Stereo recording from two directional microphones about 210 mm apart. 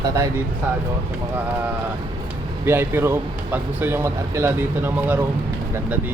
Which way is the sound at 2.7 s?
10° right (ahead or behind).